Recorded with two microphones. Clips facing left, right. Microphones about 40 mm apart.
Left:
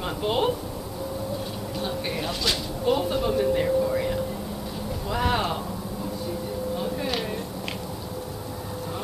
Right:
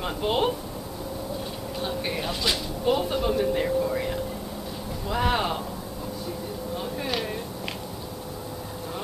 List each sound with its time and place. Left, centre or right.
0.0 s speech: centre
1.8 s speech: centre
6.8 s a sound: centre